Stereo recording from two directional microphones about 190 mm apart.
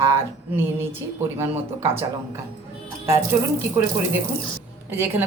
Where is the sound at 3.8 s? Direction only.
20° right (ahead or behind).